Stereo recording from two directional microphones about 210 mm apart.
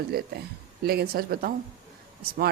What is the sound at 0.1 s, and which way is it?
A woman's voice, 50° right (ahead or behind).